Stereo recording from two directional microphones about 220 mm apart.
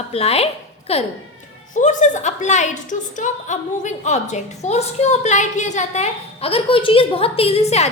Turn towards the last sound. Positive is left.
turn(degrees=30)  # may be behind; listen again after turning